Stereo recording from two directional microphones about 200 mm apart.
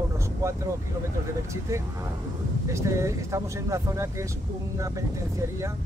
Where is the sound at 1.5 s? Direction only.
15° right (ahead or behind).